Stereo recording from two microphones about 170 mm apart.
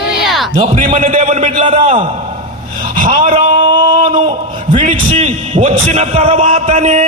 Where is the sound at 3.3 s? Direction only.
35° right (ahead or behind).